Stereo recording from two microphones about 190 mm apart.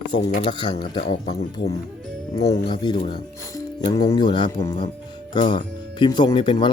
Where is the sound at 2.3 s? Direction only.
20° left (ahead or behind).